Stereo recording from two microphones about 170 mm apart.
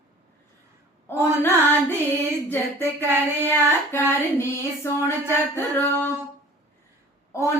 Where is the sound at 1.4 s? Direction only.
10° left (ahead or behind).